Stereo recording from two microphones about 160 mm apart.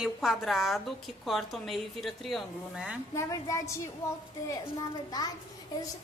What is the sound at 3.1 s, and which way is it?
Speech, 20° left (ahead or behind).